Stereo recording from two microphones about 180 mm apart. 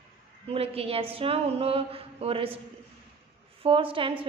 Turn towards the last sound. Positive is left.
turn(degrees=-30)  # may be behind; listen again after turning